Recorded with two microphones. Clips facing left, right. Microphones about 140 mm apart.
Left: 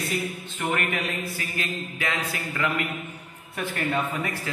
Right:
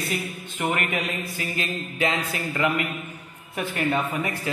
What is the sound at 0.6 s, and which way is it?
A man's voice, 15° right (ahead or behind).